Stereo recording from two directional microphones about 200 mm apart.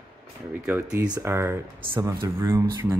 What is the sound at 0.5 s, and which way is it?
Speech, 10° right (ahead or behind).